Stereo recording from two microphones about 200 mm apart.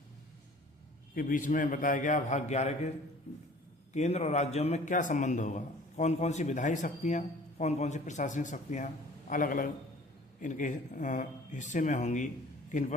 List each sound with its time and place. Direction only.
1.1 s a man's voice: 40° left (ahead or behind)
3.9 s a man's voice: 35° left (ahead or behind)